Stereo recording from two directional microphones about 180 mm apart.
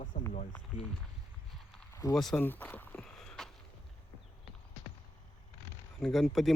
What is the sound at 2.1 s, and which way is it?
Speech, 5° left (ahead or behind).